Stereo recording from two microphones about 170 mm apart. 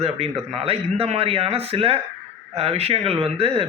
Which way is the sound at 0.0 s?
35° right (ahead or behind).